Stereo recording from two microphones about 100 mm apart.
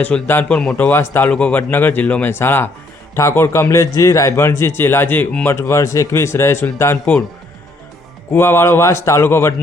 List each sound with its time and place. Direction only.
0.0 s a man's voice: 20° left (ahead or behind)
0.4 s a man's voice: 10° left (ahead or behind)
0.8 s a man's voice: 20° left (ahead or behind)
8.3 s a man's voice: 25° left (ahead or behind)